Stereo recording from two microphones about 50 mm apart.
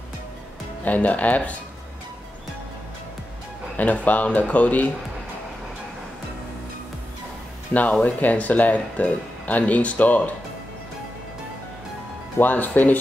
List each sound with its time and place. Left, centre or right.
0.8 s speech: left
3.7 s speech: left
7.7 s speech: left
12.4 s speech: left